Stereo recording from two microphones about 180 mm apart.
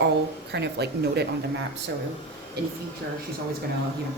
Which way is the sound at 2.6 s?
65° right (ahead or behind).